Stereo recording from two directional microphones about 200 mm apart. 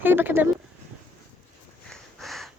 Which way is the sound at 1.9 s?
Centre (ahead or behind).